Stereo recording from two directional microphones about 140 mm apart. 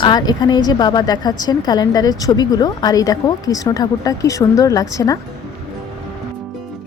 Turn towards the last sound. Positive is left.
turn(degrees=25)  # may be behind; listen again after turning